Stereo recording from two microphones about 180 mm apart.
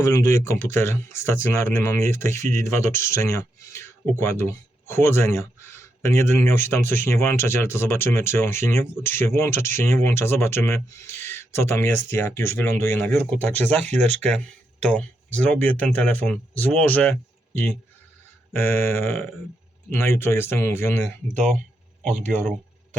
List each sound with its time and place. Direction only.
0.0 s speech: 20° left (ahead or behind)
13.8 s speech: 40° right (ahead or behind)
14.8 s speech: 10° left (ahead or behind)
18.5 s speech: 15° left (ahead or behind)
22.1 s speech: 40° right (ahead or behind)